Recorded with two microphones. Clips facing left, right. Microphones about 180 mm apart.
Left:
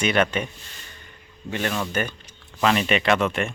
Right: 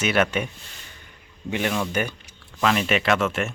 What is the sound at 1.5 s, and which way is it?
Speech, 10° right (ahead or behind).